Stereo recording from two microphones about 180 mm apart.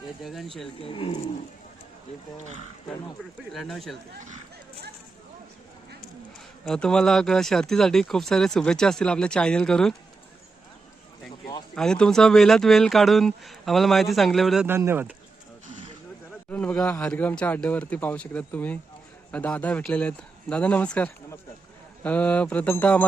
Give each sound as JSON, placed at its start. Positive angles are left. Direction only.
{"t": 0.2, "sound": "speech", "side_deg": 0}
{"t": 0.8, "sound": "speech", "side_deg": 30}
{"t": 3.5, "sound": "speech", "side_deg": 0}
{"t": 6.7, "sound": "speech", "side_deg": 5}
{"t": 11.7, "sound": "speech", "side_deg": 5}
{"t": 14.7, "sound": "speech", "side_deg": -15}
{"t": 16.5, "sound": "speech", "side_deg": 10}